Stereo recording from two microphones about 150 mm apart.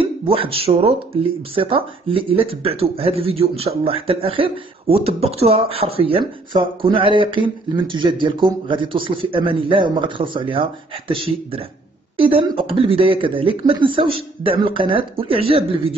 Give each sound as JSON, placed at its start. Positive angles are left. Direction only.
{"t": 0.0, "sound": "speech", "side_deg": -40}